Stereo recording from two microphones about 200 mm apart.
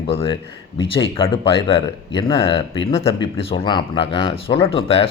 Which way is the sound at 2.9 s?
30° left (ahead or behind).